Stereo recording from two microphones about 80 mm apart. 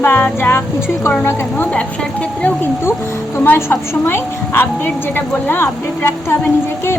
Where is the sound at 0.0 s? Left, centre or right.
Left.